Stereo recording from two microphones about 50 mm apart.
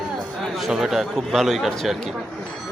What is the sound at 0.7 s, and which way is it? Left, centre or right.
A man's voice, centre.